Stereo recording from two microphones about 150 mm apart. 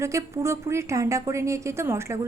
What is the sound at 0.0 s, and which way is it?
A woman's voice, 20° right (ahead or behind).